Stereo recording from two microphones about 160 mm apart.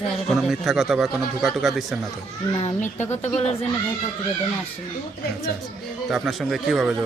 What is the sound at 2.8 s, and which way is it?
Speech, 45° left (ahead or behind).